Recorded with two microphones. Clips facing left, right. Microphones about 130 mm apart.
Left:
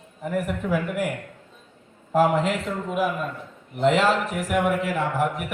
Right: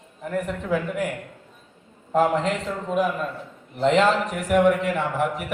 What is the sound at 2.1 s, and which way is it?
A man's voice, 5° left (ahead or behind).